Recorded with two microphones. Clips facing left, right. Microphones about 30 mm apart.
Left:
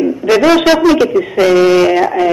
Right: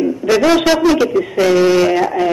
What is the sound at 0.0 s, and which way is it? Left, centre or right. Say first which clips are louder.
A man's voice: left 3 dB; centre.